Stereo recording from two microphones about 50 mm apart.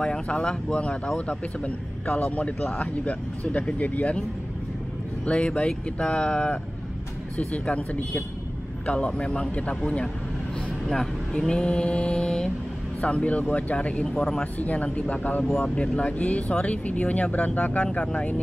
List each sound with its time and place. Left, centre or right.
0.0 s speech: centre; by 4.1 s left
5.2 s speech: left
15.7 s speech: left